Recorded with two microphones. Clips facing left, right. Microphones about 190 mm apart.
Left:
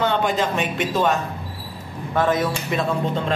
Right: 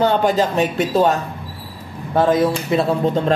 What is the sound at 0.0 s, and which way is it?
A man's voice, 40° right (ahead or behind).